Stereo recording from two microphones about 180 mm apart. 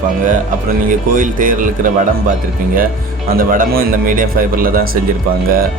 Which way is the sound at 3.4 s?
50° right (ahead or behind).